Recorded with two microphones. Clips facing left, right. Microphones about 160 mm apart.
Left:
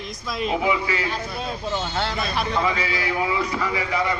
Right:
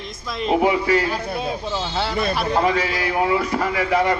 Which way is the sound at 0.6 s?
50° right (ahead or behind).